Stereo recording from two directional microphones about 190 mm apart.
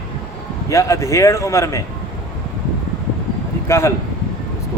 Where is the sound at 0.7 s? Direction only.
15° left (ahead or behind).